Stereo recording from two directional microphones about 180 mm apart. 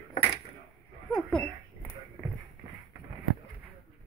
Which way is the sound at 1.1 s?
5° left (ahead or behind).